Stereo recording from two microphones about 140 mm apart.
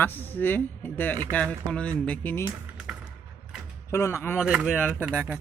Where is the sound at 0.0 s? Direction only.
15° left (ahead or behind).